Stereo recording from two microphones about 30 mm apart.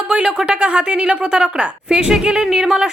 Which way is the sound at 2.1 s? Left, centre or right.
Right.